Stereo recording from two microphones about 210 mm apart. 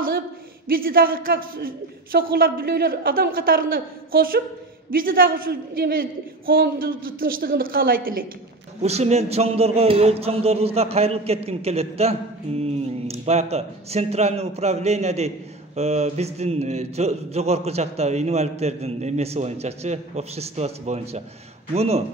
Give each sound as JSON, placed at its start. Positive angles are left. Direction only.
{"t": 0.7, "sound": "a man's voice", "side_deg": -45}
{"t": 8.8, "sound": "speech", "side_deg": -30}